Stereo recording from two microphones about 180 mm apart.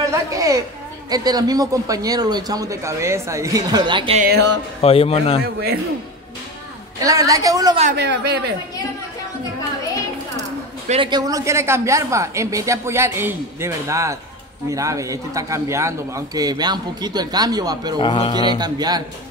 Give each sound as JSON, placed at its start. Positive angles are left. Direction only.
{"t": 0.0, "sound": "a child's voice", "side_deg": -20}
{"t": 4.2, "sound": "speech", "side_deg": -60}
{"t": 4.8, "sound": "a man's voice", "side_deg": 35}
{"t": 7.0, "sound": "a man's voice", "side_deg": -20}
{"t": 7.9, "sound": "a man's voice", "side_deg": -70}
{"t": 10.9, "sound": "a woman's voice", "side_deg": -25}
{"t": 18.0, "sound": "speech", "side_deg": 30}
{"t": 18.6, "sound": "a man's voice", "side_deg": -20}